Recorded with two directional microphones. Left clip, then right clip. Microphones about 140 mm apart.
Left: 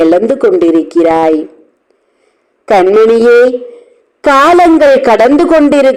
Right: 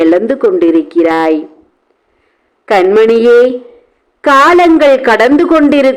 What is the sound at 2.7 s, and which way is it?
Speech, 20° left (ahead or behind).